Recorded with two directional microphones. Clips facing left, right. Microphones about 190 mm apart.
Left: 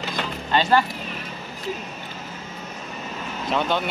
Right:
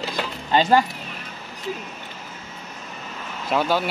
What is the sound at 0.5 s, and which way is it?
Speech, 15° right (ahead or behind).